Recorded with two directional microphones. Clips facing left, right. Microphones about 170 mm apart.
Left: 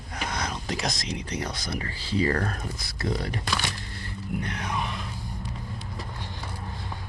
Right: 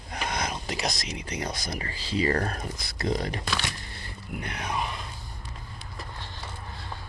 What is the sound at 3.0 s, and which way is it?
Speech, 20° right (ahead or behind).